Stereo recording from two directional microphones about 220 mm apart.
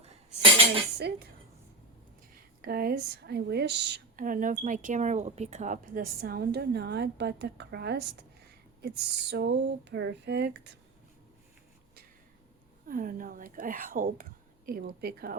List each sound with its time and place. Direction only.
0.9 s speech: 50° right (ahead or behind)
2.6 s speech: 45° right (ahead or behind)
12.9 s speech: 40° right (ahead or behind)